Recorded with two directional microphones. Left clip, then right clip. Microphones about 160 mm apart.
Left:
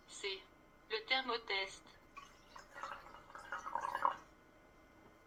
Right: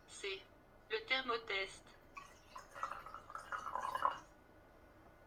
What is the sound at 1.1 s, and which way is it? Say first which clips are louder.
Speech: left 1 dB; 20° right (ahead or behind).